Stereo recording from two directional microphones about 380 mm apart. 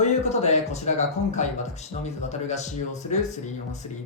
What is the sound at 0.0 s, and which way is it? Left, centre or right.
Speech, centre.